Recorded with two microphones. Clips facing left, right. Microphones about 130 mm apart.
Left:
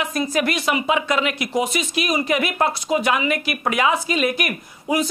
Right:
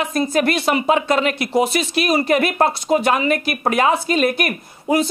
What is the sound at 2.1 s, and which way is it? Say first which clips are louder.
A woman's voice: right 5 dB; 40° right (ahead or behind).